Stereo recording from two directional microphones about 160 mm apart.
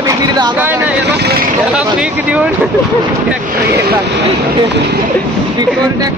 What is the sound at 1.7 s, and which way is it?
Speech, 5° right (ahead or behind).